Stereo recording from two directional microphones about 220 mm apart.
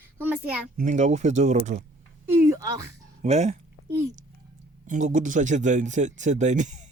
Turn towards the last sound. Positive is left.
turn(degrees=-35)  # may be behind; listen again after turning